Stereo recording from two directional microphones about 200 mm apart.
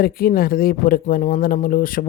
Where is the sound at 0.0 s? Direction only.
45° left (ahead or behind).